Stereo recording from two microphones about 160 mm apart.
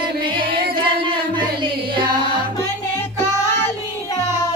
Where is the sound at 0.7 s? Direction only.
30° right (ahead or behind).